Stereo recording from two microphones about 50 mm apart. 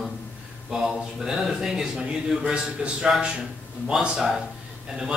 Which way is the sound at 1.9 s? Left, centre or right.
Right.